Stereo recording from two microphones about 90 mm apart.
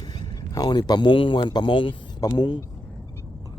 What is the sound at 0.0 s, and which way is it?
Speech, 45° left (ahead or behind).